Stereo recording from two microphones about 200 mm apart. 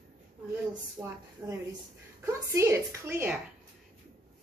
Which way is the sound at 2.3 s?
15° right (ahead or behind).